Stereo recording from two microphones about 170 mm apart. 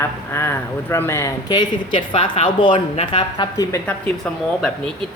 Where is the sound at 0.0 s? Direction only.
15° left (ahead or behind).